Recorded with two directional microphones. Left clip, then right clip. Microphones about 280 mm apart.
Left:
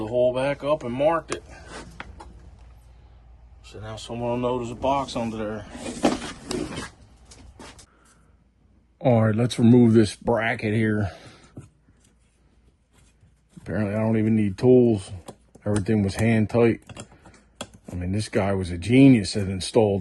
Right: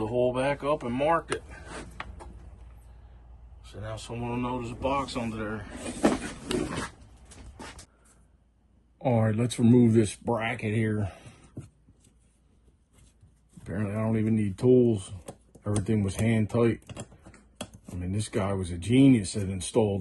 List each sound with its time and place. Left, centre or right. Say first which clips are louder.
0.0 s speech: left 4 dB; centre
3.6 s speech: left 2 dB; centre
7.5 s a sound: right 1 dB; centre
9.0 s speech: left 6 dB; left
11.6 s a sound: right 2 dB; centre
13.7 s speech: left 6 dB; left
16.7 s typing: left 3 dB; centre
18.0 s speech: left 6 dB; left